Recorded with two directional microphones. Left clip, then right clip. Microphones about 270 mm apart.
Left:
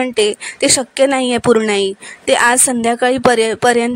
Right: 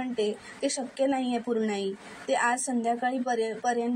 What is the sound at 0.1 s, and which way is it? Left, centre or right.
A woman's voice, left.